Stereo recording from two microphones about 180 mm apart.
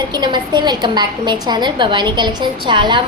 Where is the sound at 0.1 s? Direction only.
25° right (ahead or behind).